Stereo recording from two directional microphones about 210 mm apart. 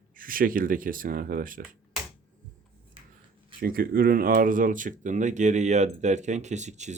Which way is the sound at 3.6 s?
45° right (ahead or behind).